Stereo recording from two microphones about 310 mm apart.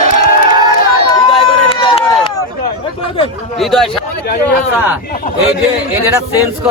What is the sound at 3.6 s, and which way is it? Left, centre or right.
Speech, centre.